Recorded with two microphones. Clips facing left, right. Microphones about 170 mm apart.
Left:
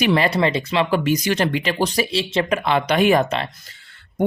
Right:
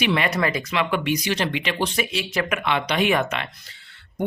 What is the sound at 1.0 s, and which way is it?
Speech, 45° left (ahead or behind).